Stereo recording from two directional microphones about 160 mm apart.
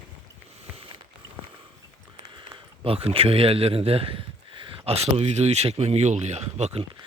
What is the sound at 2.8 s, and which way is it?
A man's voice, 35° right (ahead or behind).